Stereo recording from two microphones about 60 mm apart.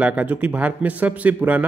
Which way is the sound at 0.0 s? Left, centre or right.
Right.